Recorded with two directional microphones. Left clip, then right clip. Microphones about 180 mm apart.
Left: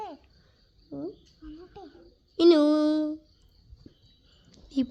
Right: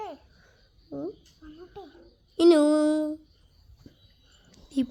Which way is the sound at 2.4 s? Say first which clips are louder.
Right 1 dB; 10° right (ahead or behind).